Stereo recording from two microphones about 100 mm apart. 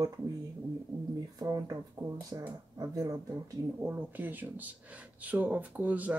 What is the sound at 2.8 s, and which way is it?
Speech, 35° right (ahead or behind).